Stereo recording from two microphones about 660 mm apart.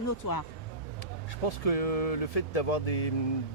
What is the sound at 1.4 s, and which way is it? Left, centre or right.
Speech, left.